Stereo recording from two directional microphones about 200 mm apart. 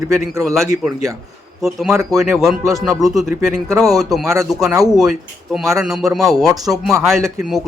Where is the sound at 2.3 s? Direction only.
Centre (ahead or behind).